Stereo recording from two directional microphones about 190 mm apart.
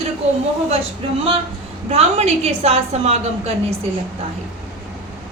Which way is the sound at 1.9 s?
35° right (ahead or behind).